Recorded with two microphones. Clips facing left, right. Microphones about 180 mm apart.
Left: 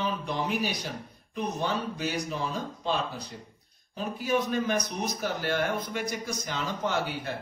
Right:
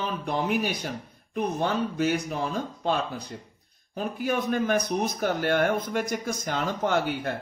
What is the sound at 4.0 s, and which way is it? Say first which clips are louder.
Speech: right 1 dB; 55° right (ahead or behind).